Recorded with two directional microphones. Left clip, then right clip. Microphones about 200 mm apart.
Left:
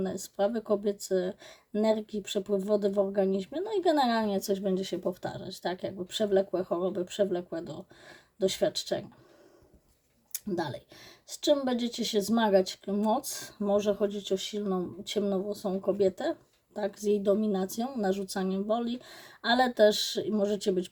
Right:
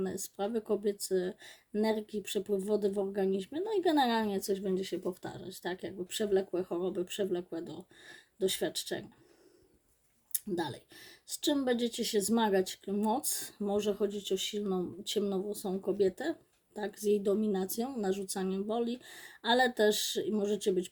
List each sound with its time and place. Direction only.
0.0 s speech: centre (ahead or behind)
10.3 s speech: 5° right (ahead or behind)